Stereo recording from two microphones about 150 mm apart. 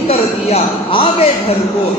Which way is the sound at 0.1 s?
40° left (ahead or behind).